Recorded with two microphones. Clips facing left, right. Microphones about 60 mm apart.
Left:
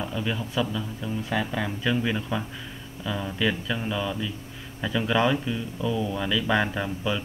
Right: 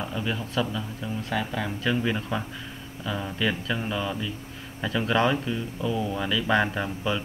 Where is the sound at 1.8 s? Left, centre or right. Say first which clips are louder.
Right 1 dB; centre.